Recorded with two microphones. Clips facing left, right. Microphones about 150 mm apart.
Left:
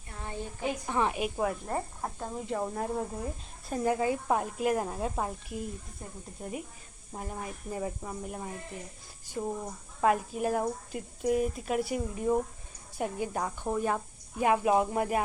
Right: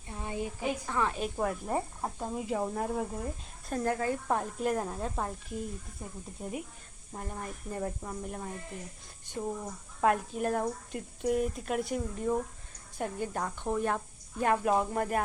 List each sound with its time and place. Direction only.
0.1 s a sound: 15° right (ahead or behind)
0.9 s speech: 20° left (ahead or behind)
1.6 s speech: 10° right (ahead or behind)